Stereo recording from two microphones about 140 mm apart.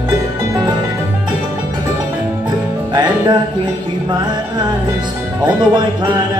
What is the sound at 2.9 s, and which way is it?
Music, 30° right (ahead or behind).